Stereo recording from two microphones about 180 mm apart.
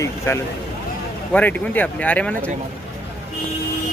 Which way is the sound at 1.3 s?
10° left (ahead or behind).